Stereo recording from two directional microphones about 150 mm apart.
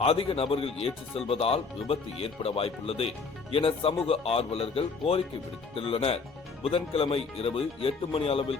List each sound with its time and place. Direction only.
0.0 s speech: 40° left (ahead or behind)